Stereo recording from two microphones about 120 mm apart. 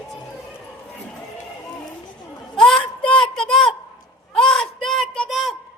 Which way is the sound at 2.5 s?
5° left (ahead or behind).